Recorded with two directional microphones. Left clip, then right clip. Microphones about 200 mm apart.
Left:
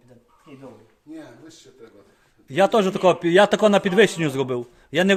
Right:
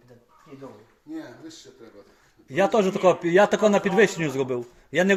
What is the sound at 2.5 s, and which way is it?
A man's voice, 25° left (ahead or behind).